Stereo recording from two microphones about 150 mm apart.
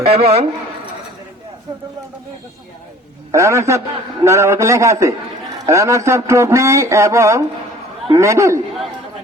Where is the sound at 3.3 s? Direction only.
20° right (ahead or behind).